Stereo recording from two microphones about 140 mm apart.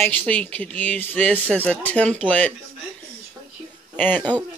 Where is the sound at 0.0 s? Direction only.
10° left (ahead or behind).